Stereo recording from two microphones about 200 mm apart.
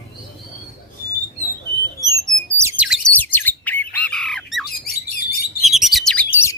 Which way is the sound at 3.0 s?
10° left (ahead or behind).